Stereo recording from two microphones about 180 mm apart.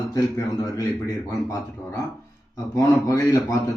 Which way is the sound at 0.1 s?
20° left (ahead or behind).